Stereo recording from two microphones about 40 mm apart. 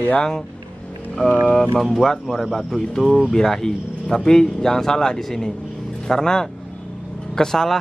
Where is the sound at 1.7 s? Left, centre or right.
Centre.